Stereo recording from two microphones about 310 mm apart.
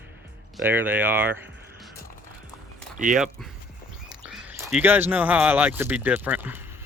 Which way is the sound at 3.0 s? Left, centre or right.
Right.